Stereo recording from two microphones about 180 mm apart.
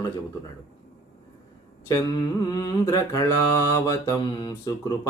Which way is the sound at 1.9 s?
20° left (ahead or behind).